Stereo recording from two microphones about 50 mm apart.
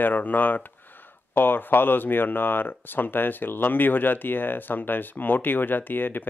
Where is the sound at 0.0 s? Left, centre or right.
Left.